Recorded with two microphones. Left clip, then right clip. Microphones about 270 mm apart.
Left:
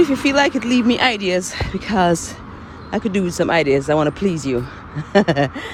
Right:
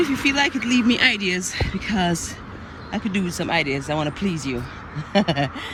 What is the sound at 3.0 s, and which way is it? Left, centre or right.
Speech, left.